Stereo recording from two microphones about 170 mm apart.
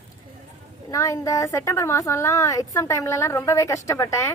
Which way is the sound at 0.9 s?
20° left (ahead or behind).